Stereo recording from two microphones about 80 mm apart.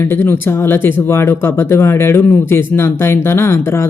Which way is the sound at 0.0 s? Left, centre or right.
Left.